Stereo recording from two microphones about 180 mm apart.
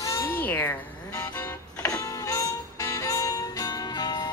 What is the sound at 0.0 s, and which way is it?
Music, 15° left (ahead or behind).